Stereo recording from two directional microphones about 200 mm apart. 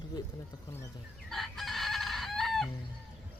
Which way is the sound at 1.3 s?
Centre (ahead or behind).